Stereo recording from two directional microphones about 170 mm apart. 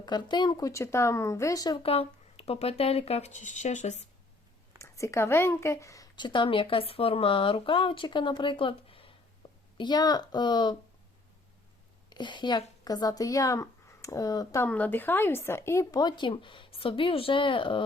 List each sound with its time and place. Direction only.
0.0 s speech: 25° left (ahead or behind); by 4.0 s 45° left (ahead or behind)
4.8 s a woman's voice: 15° left (ahead or behind)
12.0 s a woman's voice: 25° left (ahead or behind)